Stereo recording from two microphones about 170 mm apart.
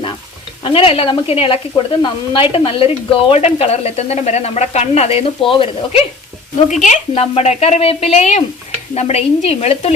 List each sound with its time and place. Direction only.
0.6 s speech: 30° left (ahead or behind)